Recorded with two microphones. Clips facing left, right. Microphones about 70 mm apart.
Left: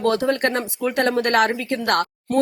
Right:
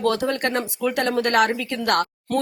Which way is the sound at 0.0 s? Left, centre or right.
Left.